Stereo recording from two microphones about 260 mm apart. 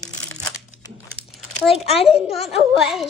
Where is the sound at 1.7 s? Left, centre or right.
Left.